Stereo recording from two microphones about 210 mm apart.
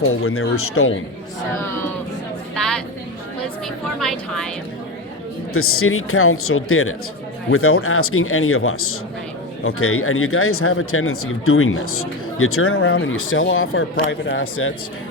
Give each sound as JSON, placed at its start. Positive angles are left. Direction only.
{"t": 0.0, "sound": "speech", "side_deg": 90}
{"t": 4.0, "sound": "a woman's voice", "side_deg": 5}
{"t": 5.5, "sound": "speech", "side_deg": 90}